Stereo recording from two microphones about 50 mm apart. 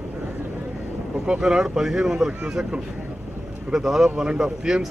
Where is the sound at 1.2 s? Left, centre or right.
Centre.